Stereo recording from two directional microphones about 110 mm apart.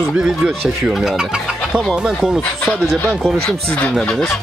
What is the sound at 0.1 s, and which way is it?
Speech, 10° right (ahead or behind).